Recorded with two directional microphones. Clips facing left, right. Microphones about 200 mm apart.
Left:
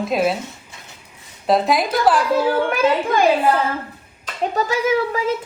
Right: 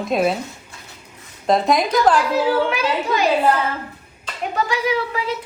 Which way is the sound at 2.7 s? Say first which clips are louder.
Left 3 dB; 50° left (ahead or behind).